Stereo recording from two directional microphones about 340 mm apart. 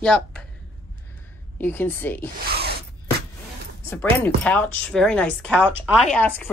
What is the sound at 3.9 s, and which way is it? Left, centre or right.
Speech, centre.